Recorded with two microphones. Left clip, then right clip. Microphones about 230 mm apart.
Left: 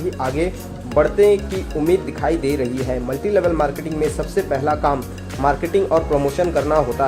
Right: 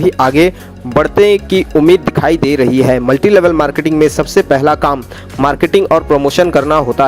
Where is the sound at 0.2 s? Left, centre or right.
Right.